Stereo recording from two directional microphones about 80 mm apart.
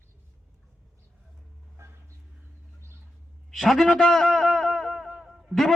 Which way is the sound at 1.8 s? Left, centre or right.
Right.